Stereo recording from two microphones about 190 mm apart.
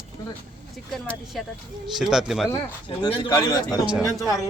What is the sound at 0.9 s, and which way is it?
A man's voice, centre (ahead or behind).